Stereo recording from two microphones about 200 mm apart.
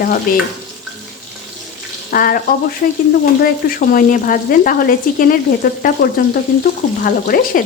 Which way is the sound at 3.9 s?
45° left (ahead or behind).